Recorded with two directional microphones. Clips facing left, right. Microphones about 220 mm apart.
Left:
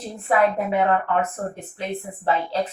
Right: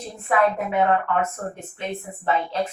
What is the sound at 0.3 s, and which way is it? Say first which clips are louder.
A woman's voice: left 1 dB; 30° left (ahead or behind).